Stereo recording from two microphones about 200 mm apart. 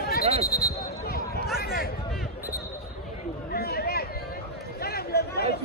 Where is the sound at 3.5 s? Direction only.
50° left (ahead or behind).